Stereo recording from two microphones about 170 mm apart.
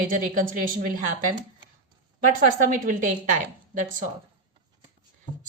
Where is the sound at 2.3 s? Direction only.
50° right (ahead or behind).